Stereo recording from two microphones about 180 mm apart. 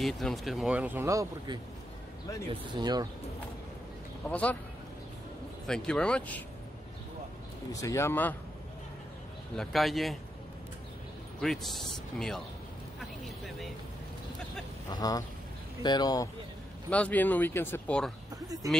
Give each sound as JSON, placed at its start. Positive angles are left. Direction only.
{"t": 0.0, "sound": "speech", "side_deg": 0}
{"t": 2.7, "sound": "speech", "side_deg": -20}
{"t": 4.3, "sound": "speech", "side_deg": 5}
{"t": 5.7, "sound": "speech", "side_deg": 5}
{"t": 7.7, "sound": "speech", "side_deg": 15}
{"t": 9.6, "sound": "speech", "side_deg": 0}
{"t": 11.4, "sound": "speech", "side_deg": 0}
{"t": 14.9, "sound": "speech", "side_deg": 20}
{"t": 16.9, "sound": "speech", "side_deg": 10}